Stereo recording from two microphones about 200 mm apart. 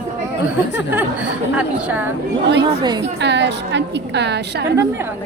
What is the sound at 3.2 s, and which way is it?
Speech, 60° right (ahead or behind).